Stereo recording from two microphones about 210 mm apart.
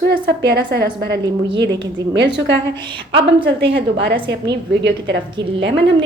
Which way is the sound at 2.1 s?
55° right (ahead or behind).